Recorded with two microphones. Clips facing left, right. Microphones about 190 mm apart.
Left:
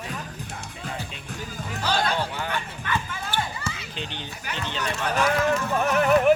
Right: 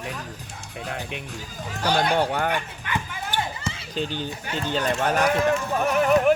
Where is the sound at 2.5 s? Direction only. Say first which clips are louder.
Right 1 dB; 15° right (ahead or behind).